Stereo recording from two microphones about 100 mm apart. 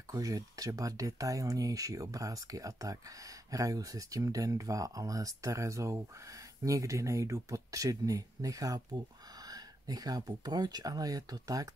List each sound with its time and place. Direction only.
0.1 s speech: 35° right (ahead or behind)